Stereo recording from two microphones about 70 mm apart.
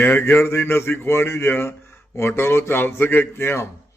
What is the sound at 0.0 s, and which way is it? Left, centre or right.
A man's voice, left.